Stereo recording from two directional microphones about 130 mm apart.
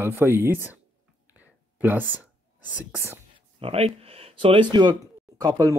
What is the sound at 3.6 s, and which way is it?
Speech, 50° right (ahead or behind).